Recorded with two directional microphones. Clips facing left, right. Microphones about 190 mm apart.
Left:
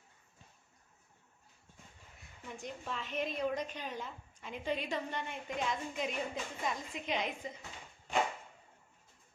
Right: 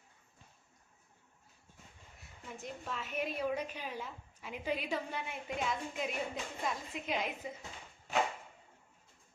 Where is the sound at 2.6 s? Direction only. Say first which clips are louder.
Even; centre (ahead or behind).